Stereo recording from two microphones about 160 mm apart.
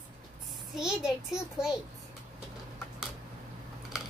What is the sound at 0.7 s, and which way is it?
Speech, 5° right (ahead or behind).